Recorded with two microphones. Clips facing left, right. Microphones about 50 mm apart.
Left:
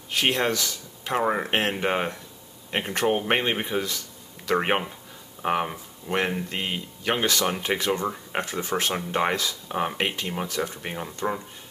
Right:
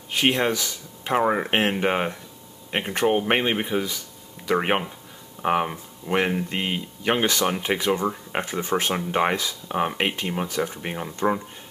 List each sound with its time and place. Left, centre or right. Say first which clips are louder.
0.1 s speech: right 2 dB; centre